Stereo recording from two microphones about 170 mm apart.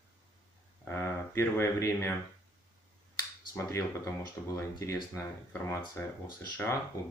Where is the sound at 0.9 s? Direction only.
15° left (ahead or behind).